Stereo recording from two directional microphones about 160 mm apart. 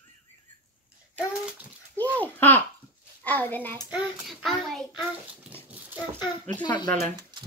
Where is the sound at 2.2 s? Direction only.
10° left (ahead or behind).